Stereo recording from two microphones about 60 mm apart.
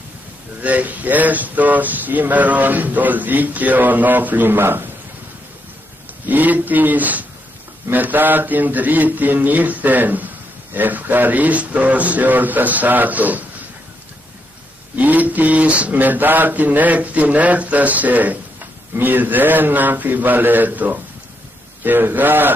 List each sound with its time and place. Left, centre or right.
0.6 s speech: right
6.2 s speech: right
15.0 s a man's voice: right